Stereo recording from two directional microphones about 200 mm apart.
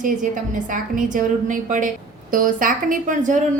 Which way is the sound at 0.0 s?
40° right (ahead or behind).